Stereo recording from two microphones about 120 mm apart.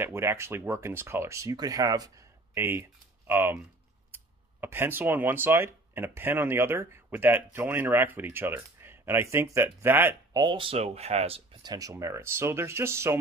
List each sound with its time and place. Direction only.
0.0 s speech: 20° right (ahead or behind)
10.3 s speech: 40° right (ahead or behind); by 11.4 s 55° right (ahead or behind)
11.6 s speech: 30° right (ahead or behind)